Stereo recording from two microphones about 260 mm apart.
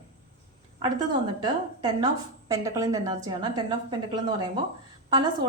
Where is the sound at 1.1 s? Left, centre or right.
Centre.